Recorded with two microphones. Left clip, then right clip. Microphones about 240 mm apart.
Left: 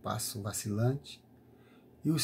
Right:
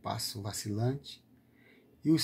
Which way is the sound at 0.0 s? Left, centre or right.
Right.